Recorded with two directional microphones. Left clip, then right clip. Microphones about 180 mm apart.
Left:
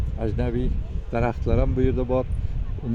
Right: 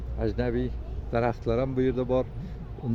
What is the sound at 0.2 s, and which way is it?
Speech, 45° left (ahead or behind).